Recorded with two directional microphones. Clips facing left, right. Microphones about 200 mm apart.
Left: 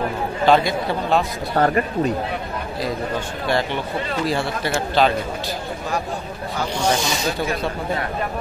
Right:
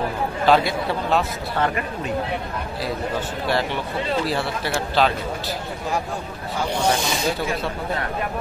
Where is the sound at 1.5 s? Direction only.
40° left (ahead or behind).